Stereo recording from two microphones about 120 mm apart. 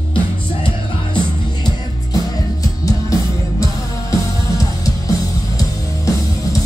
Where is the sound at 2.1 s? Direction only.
30° left (ahead or behind).